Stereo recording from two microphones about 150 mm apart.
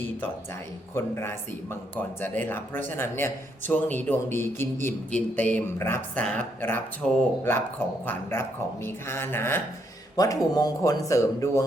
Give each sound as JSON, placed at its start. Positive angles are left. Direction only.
{"t": 0.9, "sound": "speech", "side_deg": 15}